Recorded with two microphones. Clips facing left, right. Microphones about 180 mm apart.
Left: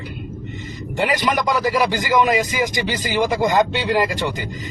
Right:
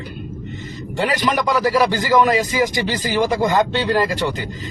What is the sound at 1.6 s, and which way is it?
A man's voice, 15° left (ahead or behind).